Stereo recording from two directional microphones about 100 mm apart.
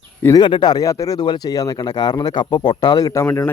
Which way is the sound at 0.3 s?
50° left (ahead or behind).